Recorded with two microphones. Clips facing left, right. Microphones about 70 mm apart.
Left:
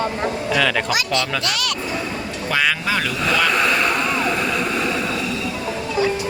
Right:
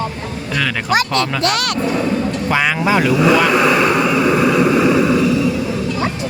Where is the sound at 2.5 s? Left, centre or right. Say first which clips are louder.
Right 4 dB; centre.